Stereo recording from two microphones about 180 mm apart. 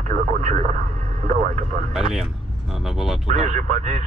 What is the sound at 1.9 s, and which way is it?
Speech, centre (ahead or behind).